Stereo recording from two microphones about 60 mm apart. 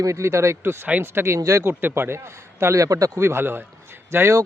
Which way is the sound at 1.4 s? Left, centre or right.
Right.